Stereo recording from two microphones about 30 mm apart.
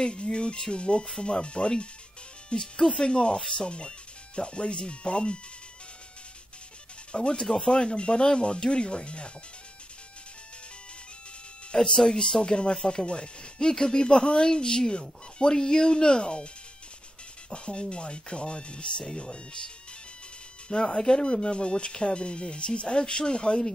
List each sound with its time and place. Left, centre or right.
0.0 s speech: left
3.6 s speech: left
7.1 s speech: left
11.7 s speech: left
17.5 s speech: left